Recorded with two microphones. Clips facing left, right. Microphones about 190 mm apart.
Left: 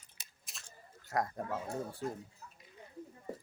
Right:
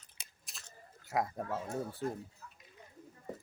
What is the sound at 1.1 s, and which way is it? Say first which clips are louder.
Speech: right 1 dB; 5° right (ahead or behind).